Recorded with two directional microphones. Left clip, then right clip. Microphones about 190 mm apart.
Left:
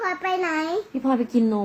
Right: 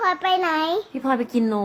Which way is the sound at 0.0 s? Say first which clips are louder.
Right 4 dB; 5° left (ahead or behind).